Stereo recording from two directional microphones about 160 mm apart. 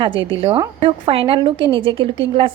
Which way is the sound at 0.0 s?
30° right (ahead or behind).